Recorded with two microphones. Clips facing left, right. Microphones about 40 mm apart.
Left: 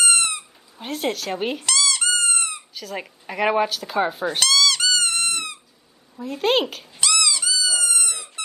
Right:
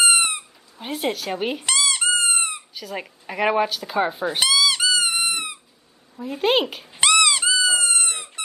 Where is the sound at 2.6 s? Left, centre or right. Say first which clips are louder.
Even; centre.